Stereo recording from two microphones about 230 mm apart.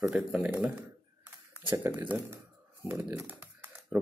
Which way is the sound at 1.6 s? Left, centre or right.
Centre.